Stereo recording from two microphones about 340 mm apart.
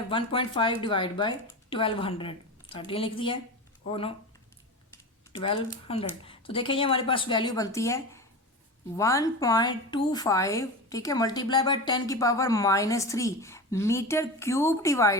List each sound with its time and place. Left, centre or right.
0.1 s a woman's voice: centre
5.3 s a woman's voice: centre